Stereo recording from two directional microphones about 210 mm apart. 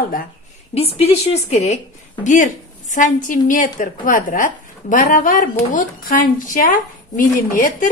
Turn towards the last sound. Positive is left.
turn(degrees=40)  # may be behind; listen again after turning